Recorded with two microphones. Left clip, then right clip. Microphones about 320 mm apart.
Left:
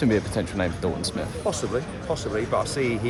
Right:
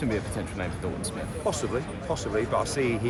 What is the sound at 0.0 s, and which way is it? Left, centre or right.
Speech, left.